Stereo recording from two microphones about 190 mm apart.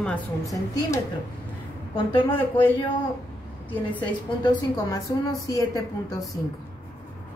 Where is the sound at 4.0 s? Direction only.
20° left (ahead or behind).